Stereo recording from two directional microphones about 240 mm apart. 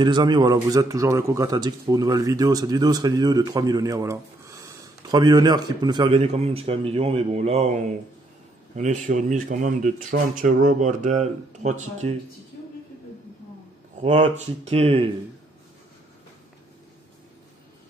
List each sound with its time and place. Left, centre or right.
0.0 s speech: centre
14.0 s speech: right